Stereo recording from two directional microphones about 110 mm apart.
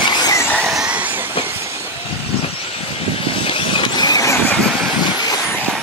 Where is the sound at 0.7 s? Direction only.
10° right (ahead or behind).